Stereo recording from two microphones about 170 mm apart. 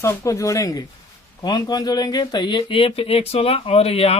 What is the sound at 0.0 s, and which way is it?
Speech, 20° left (ahead or behind).